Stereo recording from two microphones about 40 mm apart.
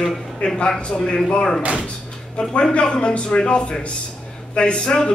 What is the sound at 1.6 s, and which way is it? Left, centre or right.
Speech, right.